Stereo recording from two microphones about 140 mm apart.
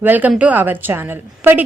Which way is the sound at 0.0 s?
10° right (ahead or behind).